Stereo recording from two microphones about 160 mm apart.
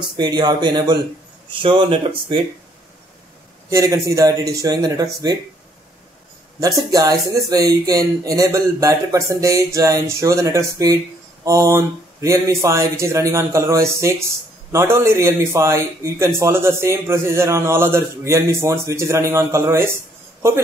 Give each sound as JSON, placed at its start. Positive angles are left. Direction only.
{"t": 0.0, "sound": "speech", "side_deg": -25}
{"t": 3.7, "sound": "speech", "side_deg": -20}
{"t": 6.6, "sound": "a man's voice", "side_deg": -20}